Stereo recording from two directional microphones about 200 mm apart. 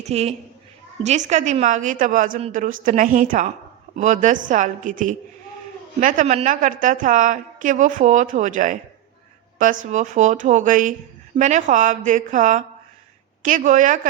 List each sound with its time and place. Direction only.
0.0 s a woman's voice: 30° right (ahead or behind)